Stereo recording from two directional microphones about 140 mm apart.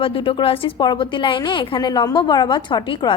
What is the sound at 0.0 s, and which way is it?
A woman's voice, 40° left (ahead or behind).